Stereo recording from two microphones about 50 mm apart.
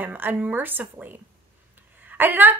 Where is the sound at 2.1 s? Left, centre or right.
Right.